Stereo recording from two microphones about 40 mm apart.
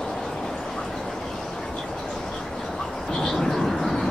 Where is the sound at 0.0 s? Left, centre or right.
Centre.